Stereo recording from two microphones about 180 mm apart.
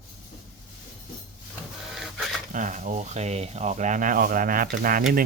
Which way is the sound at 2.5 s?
45° right (ahead or behind).